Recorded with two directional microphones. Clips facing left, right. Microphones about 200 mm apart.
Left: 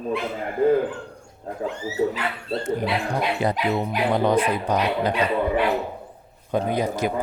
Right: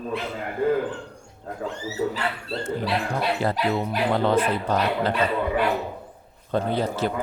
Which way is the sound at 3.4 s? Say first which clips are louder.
Left 1 dB; 15° left (ahead or behind).